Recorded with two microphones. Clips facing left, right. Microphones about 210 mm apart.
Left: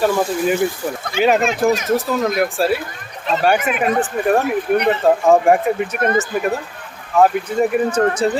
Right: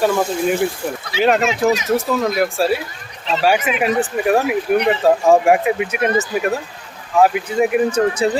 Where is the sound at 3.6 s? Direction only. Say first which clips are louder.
Even; 50° left (ahead or behind).